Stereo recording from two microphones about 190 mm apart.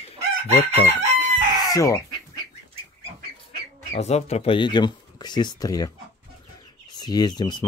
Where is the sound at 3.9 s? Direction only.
35° left (ahead or behind).